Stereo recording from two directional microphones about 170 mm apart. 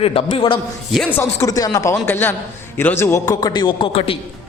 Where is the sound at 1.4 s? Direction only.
20° left (ahead or behind).